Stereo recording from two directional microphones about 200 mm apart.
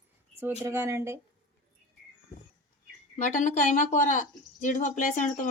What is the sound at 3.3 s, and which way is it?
Speech, 40° left (ahead or behind).